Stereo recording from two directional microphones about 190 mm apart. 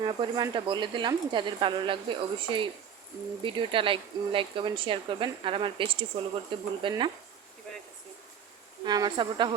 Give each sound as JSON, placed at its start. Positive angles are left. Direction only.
{"t": 0.0, "sound": "speech", "side_deg": -25}
{"t": 8.8, "sound": "speech", "side_deg": -20}